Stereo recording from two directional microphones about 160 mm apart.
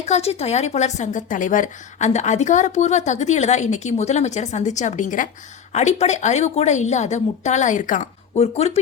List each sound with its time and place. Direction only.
0.0 s speech: 40° left (ahead or behind)